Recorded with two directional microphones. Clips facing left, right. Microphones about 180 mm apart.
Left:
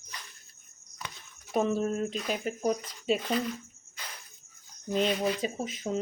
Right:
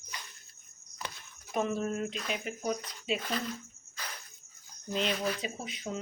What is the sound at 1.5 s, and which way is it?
Speech, 35° left (ahead or behind).